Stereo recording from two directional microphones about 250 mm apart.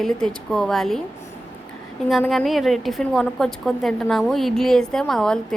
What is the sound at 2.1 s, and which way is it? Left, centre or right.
A woman's voice, centre.